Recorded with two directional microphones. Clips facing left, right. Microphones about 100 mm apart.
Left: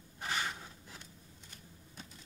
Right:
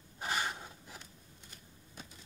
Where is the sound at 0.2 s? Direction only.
15° right (ahead or behind).